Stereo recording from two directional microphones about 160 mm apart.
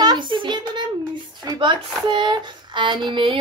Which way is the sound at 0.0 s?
25° right (ahead or behind).